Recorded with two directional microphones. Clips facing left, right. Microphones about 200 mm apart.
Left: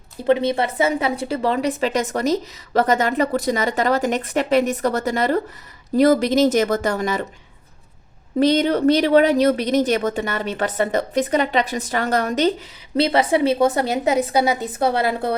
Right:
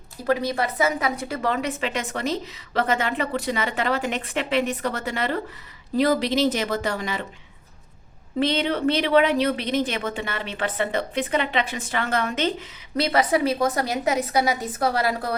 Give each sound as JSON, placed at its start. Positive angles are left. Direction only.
{"t": 0.3, "sound": "a woman's voice", "side_deg": 25}
{"t": 8.4, "sound": "a woman's voice", "side_deg": 40}